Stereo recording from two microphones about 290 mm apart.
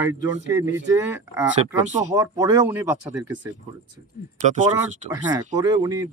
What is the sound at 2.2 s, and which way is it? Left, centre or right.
A man's voice, centre.